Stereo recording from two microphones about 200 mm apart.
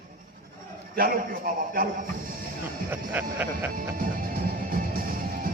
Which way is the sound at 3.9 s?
45° right (ahead or behind).